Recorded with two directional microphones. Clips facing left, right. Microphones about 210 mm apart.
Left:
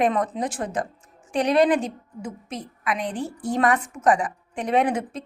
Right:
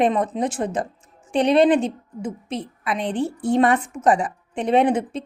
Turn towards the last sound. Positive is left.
turn(degrees=-25)  # may be behind; listen again after turning